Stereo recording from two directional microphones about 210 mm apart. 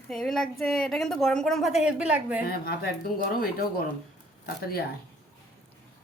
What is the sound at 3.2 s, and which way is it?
Speech, 45° left (ahead or behind).